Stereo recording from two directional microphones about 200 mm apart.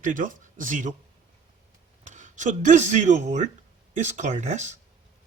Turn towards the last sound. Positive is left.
turn(degrees=-35)  # may be behind; listen again after turning